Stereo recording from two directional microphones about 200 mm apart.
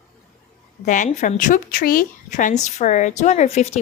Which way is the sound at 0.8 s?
40° left (ahead or behind).